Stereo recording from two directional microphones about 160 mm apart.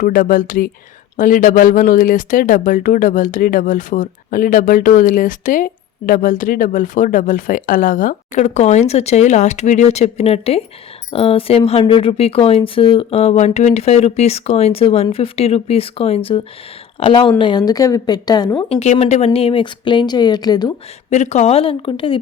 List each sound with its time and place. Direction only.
0.0 s speech: 60° left (ahead or behind); by 18.6 s 25° left (ahead or behind)
18.7 s speech: 40° left (ahead or behind); by 20.7 s 25° left (ahead or behind)
21.1 s speech: 45° left (ahead or behind)